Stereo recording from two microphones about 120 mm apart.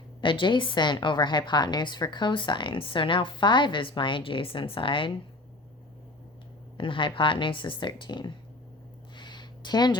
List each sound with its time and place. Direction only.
0.2 s a woman's voice: 45° left (ahead or behind)
6.7 s a woman's voice: 45° left (ahead or behind)
9.1 s a sound: 40° left (ahead or behind)